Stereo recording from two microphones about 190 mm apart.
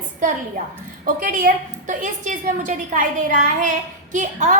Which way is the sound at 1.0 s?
45° right (ahead or behind).